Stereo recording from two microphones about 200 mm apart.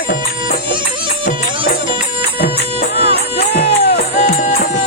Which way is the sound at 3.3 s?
55° left (ahead or behind).